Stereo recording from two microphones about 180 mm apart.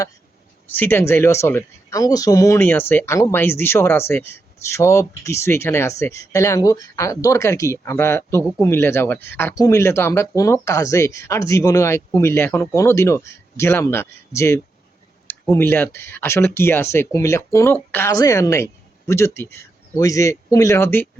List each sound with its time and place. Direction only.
0.7 s a woman's voice: 10° left (ahead or behind)